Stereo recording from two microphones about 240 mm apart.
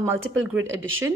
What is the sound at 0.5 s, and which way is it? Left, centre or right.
Speech, right.